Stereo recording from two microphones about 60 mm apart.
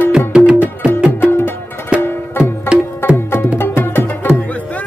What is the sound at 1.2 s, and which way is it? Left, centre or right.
Music, left.